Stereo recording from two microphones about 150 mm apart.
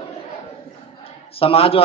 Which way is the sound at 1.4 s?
40° left (ahead or behind).